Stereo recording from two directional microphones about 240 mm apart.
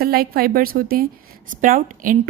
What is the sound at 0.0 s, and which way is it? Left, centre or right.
A woman's voice, right.